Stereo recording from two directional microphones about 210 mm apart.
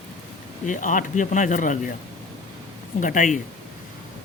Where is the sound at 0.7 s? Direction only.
40° left (ahead or behind).